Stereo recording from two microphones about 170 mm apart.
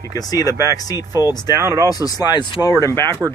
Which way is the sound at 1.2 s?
25° left (ahead or behind).